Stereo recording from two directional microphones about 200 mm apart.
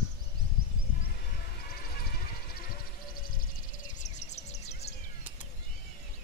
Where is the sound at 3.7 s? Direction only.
40° left (ahead or behind).